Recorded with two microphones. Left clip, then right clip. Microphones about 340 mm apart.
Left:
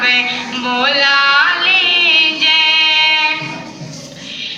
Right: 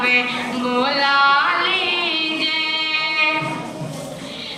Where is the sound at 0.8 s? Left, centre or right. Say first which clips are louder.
Left 4 dB; left.